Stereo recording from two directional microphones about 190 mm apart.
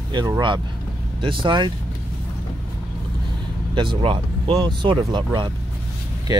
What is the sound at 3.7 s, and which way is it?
Speech, 25° right (ahead or behind).